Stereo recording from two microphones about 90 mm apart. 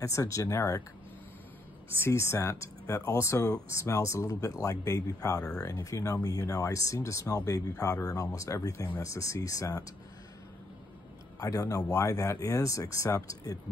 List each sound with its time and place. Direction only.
0.0 s speech: 35° left (ahead or behind)
2.0 s speech: 30° left (ahead or behind)
11.3 s speech: 40° left (ahead or behind)